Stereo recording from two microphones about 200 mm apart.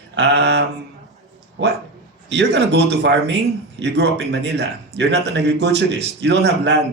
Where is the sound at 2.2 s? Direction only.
60° right (ahead or behind).